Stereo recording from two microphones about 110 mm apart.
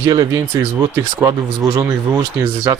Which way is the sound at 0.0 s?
30° right (ahead or behind).